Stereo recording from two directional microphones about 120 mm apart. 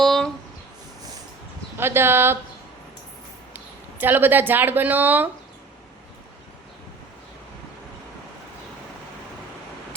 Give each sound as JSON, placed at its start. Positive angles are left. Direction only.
{"t": 0.0, "sound": "a sound", "side_deg": 5}
{"t": 1.8, "sound": "speech", "side_deg": -20}
{"t": 4.0, "sound": "a woman's voice", "side_deg": -15}